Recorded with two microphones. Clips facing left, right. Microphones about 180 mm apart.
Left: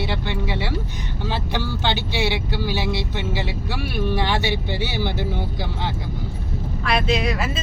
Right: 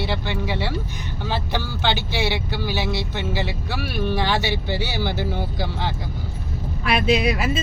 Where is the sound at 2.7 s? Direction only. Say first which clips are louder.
Even; 25° left (ahead or behind).